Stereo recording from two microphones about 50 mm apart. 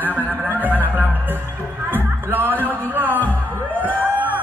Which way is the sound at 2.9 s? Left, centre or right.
Right.